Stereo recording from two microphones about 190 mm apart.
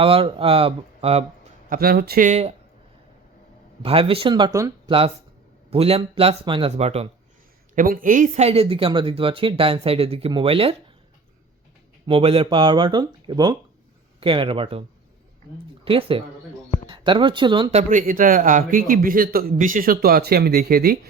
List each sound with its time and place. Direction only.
0.0 s speech: 30° right (ahead or behind)
1.7 s speech: 55° right (ahead or behind); by 2.6 s 35° right (ahead or behind)
3.8 s speech: 30° right (ahead or behind)
7.8 s speech: 45° right (ahead or behind); by 10.8 s 30° right (ahead or behind)
12.0 s speech: 30° right (ahead or behind); by 21.1 s 55° right (ahead or behind)